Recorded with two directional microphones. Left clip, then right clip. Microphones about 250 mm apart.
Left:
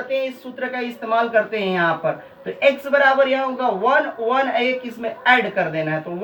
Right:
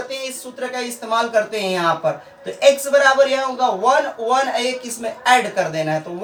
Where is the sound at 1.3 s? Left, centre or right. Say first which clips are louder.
Even; right.